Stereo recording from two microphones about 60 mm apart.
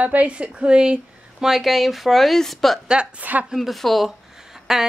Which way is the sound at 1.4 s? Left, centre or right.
Centre.